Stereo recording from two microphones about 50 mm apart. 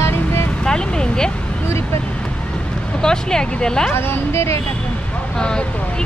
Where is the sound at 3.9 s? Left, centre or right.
Left.